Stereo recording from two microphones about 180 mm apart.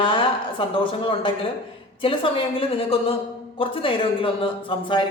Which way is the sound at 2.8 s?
30° left (ahead or behind).